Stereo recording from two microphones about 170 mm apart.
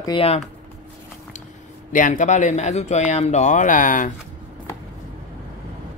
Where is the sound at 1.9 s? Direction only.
45° left (ahead or behind).